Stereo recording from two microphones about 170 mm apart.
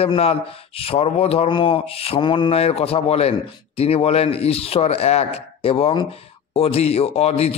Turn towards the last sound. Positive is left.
turn(degrees=40)  # may be behind; listen again after turning